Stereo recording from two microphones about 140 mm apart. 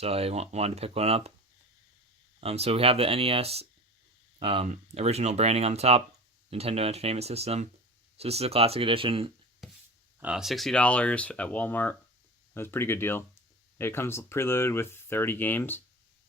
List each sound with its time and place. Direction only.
0.0 s speech: 45° right (ahead or behind)
2.4 s speech: 45° right (ahead or behind)
9.6 s a sound: centre (ahead or behind)
10.2 s speech: 5° right (ahead or behind); by 15.8 s 15° left (ahead or behind)